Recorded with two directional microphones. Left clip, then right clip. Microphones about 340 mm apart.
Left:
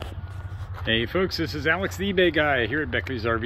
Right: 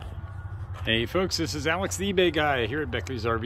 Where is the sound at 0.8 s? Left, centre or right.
Centre.